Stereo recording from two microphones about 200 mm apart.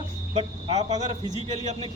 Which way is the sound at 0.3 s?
35° right (ahead or behind).